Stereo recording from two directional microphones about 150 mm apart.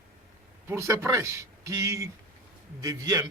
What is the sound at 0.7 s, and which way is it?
Speech, 20° right (ahead or behind).